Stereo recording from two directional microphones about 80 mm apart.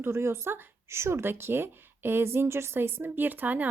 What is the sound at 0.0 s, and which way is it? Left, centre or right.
Speech, right.